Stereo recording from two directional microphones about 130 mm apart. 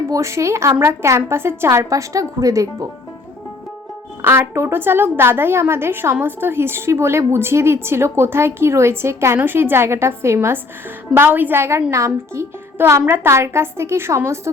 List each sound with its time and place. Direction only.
0.1 s a woman's voice: 20° right (ahead or behind)
4.2 s a woman's voice: 20° right (ahead or behind)